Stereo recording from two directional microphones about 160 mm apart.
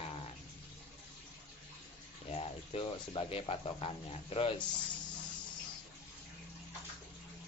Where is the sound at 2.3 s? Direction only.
35° left (ahead or behind).